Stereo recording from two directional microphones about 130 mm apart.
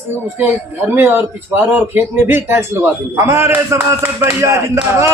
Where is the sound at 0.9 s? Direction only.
15° right (ahead or behind).